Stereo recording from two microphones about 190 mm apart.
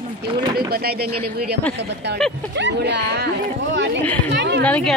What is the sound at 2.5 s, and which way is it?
Speech, 65° right (ahead or behind).